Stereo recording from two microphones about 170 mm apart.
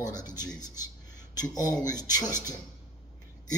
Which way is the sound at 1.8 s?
20° left (ahead or behind).